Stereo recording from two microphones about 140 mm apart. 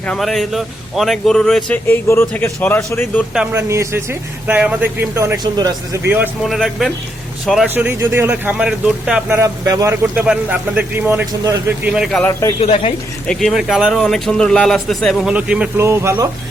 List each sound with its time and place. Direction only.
0.1 s speech: centre (ahead or behind)
3.5 s speech: 20° right (ahead or behind)
5.4 s speech: 30° right (ahead or behind)
6.4 s speech: centre (ahead or behind)
7.7 s speech: 15° right (ahead or behind)
9.3 s speech: 20° right (ahead or behind)
10.2 s speech: 10° right (ahead or behind)
11.3 s speech: 25° right (ahead or behind)
11.9 s speech: 5° right (ahead or behind)
12.2 s speech: 20° left (ahead or behind)
12.5 s speech: 45° left (ahead or behind)
13.2 s speech: 5° left (ahead or behind)
15.8 s speech: 20° right (ahead or behind)